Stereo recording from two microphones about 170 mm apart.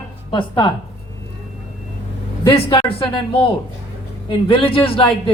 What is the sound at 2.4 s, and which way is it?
Speech, 20° left (ahead or behind).